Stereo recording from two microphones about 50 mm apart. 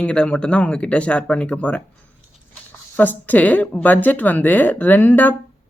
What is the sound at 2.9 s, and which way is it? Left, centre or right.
Speech, left.